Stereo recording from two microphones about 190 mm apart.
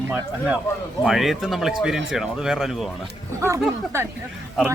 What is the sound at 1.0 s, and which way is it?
Speech, centre (ahead or behind).